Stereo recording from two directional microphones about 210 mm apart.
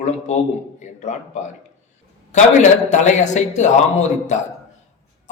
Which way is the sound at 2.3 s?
35° left (ahead or behind).